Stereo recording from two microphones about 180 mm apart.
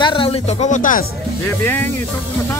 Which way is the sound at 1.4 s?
10° left (ahead or behind).